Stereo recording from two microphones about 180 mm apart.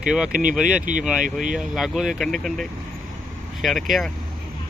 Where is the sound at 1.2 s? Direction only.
45° right (ahead or behind).